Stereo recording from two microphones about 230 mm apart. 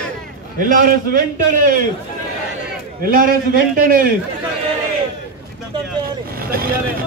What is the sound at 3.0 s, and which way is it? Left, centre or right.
A man's voice, right.